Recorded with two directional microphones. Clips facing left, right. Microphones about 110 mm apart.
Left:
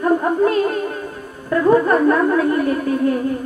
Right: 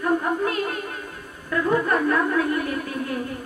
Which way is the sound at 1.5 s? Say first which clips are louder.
Left 7 dB; 30° left (ahead or behind).